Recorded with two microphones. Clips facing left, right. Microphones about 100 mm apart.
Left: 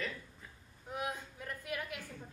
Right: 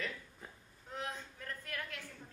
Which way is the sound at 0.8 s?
10° left (ahead or behind).